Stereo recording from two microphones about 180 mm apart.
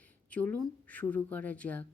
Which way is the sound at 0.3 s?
10° left (ahead or behind).